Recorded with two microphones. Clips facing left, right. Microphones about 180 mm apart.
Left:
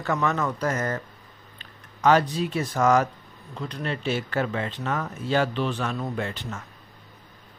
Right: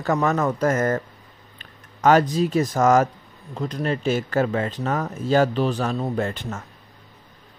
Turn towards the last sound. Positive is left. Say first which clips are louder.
# right 5 dB
turn(degrees=-45)  # may be behind; listen again after turning